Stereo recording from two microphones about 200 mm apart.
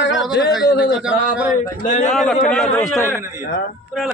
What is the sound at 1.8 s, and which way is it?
Speech, 35° left (ahead or behind).